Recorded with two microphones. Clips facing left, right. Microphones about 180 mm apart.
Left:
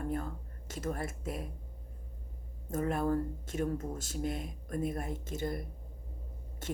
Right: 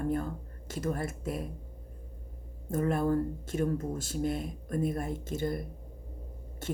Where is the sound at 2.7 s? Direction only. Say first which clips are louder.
Right 3 dB; 35° right (ahead or behind).